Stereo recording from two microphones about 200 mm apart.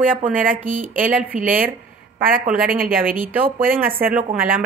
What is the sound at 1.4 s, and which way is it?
Speech, 45° right (ahead or behind).